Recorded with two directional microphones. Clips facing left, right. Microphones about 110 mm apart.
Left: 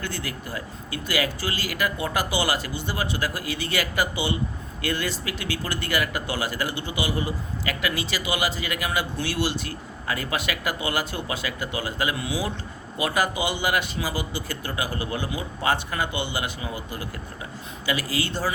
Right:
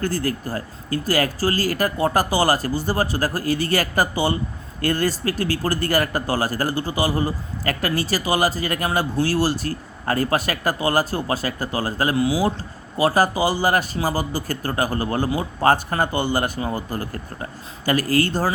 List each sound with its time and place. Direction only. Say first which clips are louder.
0.0 s speech: right 9 dB; 40° right (ahead or behind)